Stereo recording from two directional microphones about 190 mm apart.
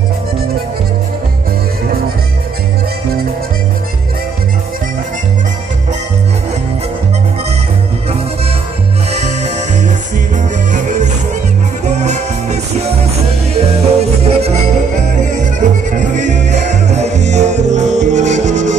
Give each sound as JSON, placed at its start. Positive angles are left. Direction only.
{"t": 9.1, "sound": "music", "side_deg": -35}